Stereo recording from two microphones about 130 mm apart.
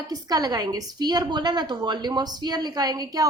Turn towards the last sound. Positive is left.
turn(degrees=-30)  # may be behind; listen again after turning